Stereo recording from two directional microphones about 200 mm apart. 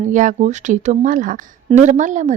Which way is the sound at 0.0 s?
40° right (ahead or behind).